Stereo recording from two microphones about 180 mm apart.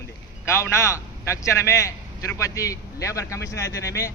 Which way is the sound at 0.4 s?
15° left (ahead or behind).